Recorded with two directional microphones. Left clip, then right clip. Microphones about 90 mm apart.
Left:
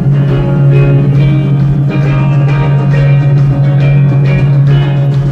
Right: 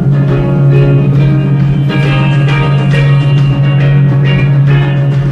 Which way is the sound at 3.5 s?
20° right (ahead or behind).